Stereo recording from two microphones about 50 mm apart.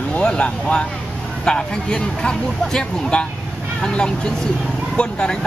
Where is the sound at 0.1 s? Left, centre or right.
Left.